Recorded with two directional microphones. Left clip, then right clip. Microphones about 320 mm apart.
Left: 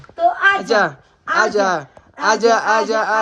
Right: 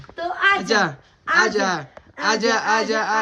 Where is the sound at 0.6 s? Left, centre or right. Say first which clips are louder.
Left 4 dB; centre.